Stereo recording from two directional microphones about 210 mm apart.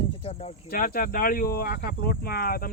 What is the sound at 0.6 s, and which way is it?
Speech, 45° left (ahead or behind).